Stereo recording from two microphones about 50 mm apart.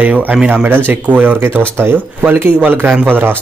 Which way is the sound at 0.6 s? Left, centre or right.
Right.